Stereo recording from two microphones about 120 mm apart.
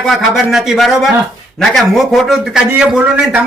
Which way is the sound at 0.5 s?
Centre (ahead or behind).